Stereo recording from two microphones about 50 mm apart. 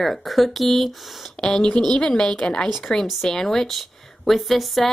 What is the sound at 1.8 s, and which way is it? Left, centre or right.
A woman's voice, centre.